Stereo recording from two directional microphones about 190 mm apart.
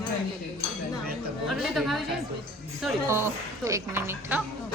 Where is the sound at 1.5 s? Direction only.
Centre (ahead or behind).